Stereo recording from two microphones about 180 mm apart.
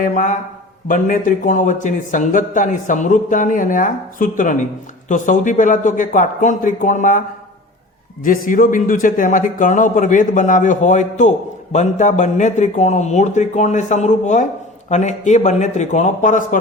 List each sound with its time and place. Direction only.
0.0 s a man's voice: 45° left (ahead or behind)
8.2 s a man's voice: 50° left (ahead or behind)